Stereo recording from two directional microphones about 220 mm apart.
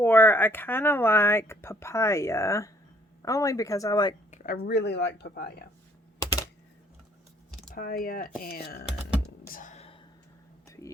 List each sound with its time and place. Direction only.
0.0 s speech: 10° left (ahead or behind)
4.3 s a sound: 35° left (ahead or behind)
4.6 s speech: 50° left (ahead or behind)
7.8 s speech: 40° left (ahead or behind)
9.5 s whispering: 35° left (ahead or behind)